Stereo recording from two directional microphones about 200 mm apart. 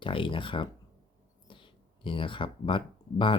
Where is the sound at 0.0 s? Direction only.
25° left (ahead or behind).